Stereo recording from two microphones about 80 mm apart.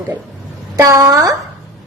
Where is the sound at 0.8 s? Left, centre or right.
Right.